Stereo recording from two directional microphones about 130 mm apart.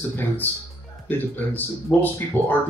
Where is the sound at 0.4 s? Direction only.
15° left (ahead or behind).